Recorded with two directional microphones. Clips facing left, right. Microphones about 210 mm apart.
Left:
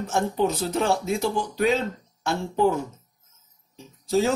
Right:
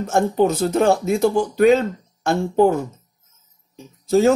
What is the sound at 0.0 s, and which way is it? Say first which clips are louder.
Speech: right 6 dB; 50° right (ahead or behind).